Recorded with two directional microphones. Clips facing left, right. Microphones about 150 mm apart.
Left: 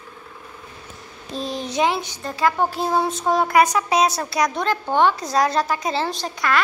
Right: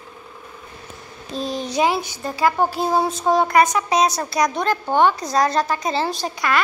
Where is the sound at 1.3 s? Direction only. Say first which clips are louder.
Right 1 dB; centre (ahead or behind).